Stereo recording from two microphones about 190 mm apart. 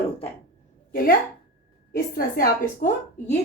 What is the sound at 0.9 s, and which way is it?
A woman's voice, 50° left (ahead or behind).